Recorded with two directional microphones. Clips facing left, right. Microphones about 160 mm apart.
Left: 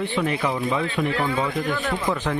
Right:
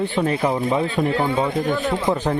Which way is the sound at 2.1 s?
30° right (ahead or behind).